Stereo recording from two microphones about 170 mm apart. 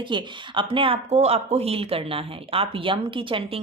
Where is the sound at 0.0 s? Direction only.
30° right (ahead or behind).